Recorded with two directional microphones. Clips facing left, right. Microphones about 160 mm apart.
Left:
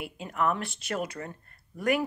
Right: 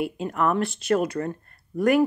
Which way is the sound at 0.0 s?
40° right (ahead or behind).